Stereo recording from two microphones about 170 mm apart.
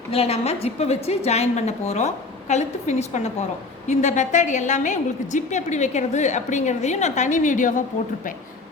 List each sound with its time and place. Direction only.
0.1 s a woman's voice: 35° left (ahead or behind)